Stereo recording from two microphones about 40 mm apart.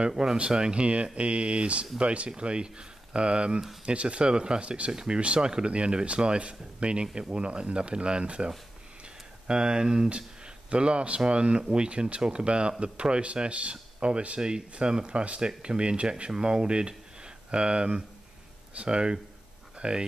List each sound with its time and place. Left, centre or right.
0.1 s speech: centre
9.5 s speech: right